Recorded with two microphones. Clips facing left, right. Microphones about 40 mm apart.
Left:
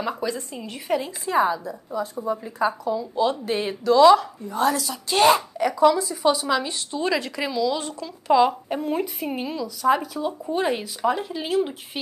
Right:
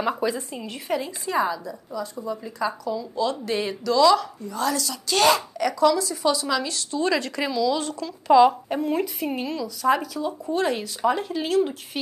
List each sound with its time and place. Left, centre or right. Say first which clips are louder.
0.0 s a woman's voice: right 2 dB; centre
1.3 s speech: left 3 dB; centre
2.0 s speech: left 4 dB; left
7.1 s a woman's voice: even; centre
10.1 s speech: even; centre
11.0 s a woman's voice: right 1 dB; centre